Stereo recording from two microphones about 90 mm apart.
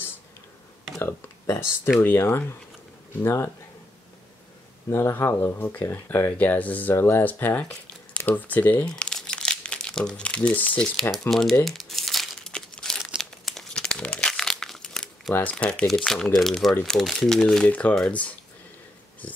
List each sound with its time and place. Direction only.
0.9 s speech: 30° left (ahead or behind)
4.8 s speech: 30° left (ahead or behind)
11.0 s speech: 5° left (ahead or behind)
11.6 s crumpling: centre (ahead or behind)
15.3 s speech: 15° left (ahead or behind)